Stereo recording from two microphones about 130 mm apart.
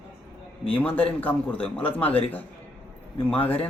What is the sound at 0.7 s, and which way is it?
A man's voice, 10° left (ahead or behind).